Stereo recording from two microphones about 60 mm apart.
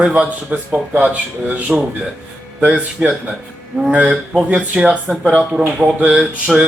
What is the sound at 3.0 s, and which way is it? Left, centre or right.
Speech, centre.